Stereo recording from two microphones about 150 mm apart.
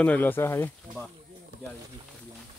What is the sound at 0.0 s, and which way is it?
Speech, 10° left (ahead or behind).